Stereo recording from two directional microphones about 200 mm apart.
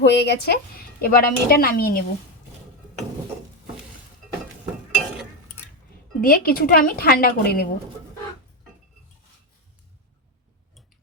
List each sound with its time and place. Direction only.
0.0 s speech: 55° left (ahead or behind)
6.2 s speech: 45° left (ahead or behind)